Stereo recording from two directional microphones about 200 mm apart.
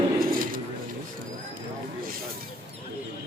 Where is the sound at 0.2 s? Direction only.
45° right (ahead or behind).